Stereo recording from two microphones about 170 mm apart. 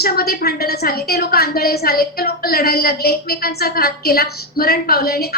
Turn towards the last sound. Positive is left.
turn(degrees=65)  # may be behind; listen again after turning